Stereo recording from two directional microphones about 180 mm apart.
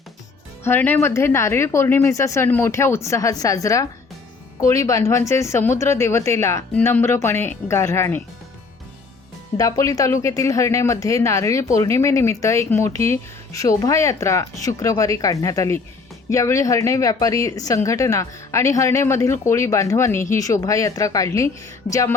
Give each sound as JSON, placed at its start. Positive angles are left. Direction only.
{"t": 0.6, "sound": "a woman's voice", "side_deg": 10}
{"t": 9.6, "sound": "a woman's voice", "side_deg": 20}